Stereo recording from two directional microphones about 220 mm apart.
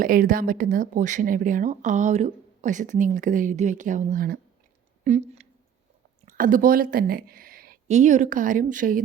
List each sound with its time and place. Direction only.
0.0 s speech: 40° right (ahead or behind)